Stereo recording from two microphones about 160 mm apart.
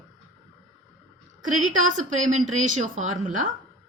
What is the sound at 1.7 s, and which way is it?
A woman's voice, 50° right (ahead or behind).